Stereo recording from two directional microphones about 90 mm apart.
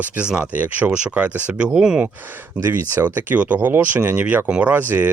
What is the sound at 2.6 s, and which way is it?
Speech, 30° right (ahead or behind).